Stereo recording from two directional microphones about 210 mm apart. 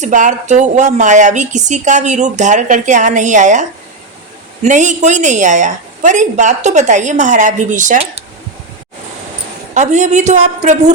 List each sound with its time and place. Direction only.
0.0 s a woman's voice: 35° right (ahead or behind)
9.7 s a woman's voice: 35° right (ahead or behind)